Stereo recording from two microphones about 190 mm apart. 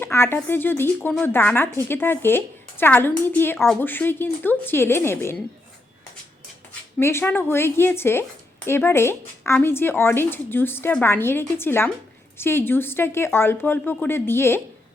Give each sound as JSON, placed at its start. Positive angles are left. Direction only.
{"t": 0.0, "sound": "speech", "side_deg": 10}
{"t": 7.0, "sound": "speech", "side_deg": 10}